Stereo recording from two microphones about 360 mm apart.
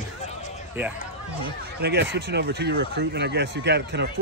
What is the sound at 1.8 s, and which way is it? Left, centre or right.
Speech, right.